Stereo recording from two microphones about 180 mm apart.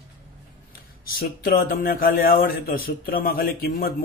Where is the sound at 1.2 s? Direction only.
55° left (ahead or behind).